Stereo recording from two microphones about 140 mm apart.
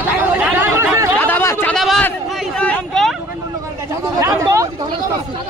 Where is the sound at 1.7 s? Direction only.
Centre (ahead or behind).